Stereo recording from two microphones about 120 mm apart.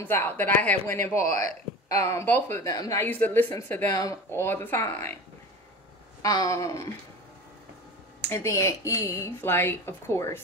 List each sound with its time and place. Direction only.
0.0 s speech: 15° left (ahead or behind)
1.1 s speech: 80° right
2.0 s speech: 25° left (ahead or behind)
3.0 s speech: 15° left (ahead or behind)
6.2 s speech: 30° left (ahead or behind)
8.2 s speech: 25° left (ahead or behind)